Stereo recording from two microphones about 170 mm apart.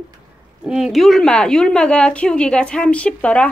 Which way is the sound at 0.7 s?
5° right (ahead or behind).